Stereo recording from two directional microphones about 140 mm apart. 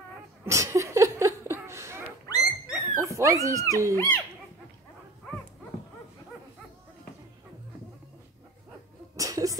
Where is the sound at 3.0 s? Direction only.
20° right (ahead or behind).